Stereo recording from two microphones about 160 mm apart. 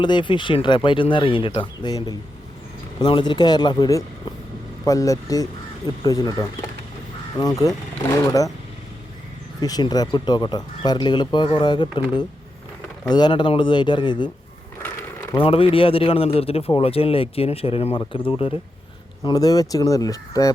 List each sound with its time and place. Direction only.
0.0 s a man's voice: 30° left (ahead or behind)
3.0 s speech: 30° left (ahead or behind)
9.6 s speech: 25° left (ahead or behind)
13.1 s speech: 25° left (ahead or behind)
14.8 s a sound: 15° left (ahead or behind)
15.4 s a man's voice: 35° left (ahead or behind)
19.2 s speech: 25° left (ahead or behind)